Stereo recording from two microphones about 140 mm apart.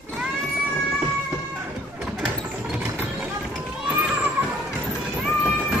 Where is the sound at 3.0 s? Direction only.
10° right (ahead or behind).